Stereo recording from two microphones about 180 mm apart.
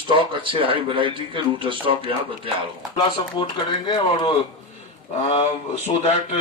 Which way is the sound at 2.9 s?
25° left (ahead or behind).